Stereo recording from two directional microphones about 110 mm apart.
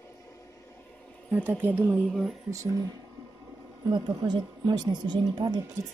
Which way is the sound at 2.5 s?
30° right (ahead or behind).